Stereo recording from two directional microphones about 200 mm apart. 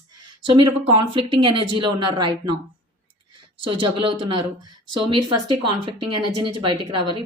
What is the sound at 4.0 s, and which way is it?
Speech, 25° right (ahead or behind).